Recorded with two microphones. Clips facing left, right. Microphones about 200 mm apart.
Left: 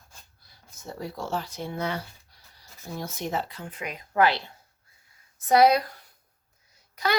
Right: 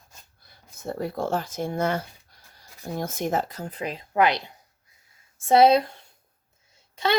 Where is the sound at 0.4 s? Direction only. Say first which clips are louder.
Right 8 dB; 55° right (ahead or behind).